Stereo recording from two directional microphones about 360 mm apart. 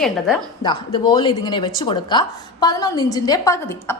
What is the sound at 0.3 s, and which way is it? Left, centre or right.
Speech, centre.